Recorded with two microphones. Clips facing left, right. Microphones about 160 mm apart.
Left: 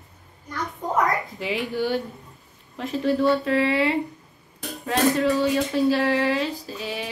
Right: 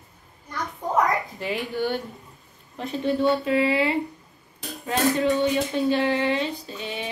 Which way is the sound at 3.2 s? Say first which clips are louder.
Right 2 dB; 25° right (ahead or behind).